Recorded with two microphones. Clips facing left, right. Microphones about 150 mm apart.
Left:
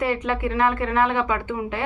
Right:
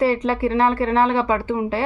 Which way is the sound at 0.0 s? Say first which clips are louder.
Right 5 dB; 35° right (ahead or behind).